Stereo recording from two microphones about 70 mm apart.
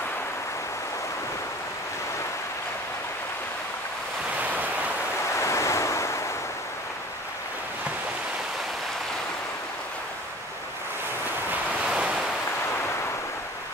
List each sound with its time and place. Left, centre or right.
4.4 s waves: right
5.4 s waves: left
11.8 s waves: centre